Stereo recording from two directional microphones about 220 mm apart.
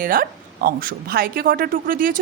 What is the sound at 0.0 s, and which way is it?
A woman's voice, 40° right (ahead or behind).